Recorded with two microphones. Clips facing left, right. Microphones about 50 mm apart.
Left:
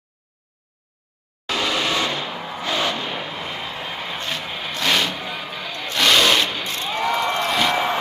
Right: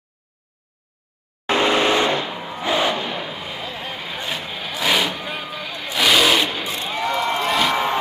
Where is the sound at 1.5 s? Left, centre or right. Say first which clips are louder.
Right 5 dB; right.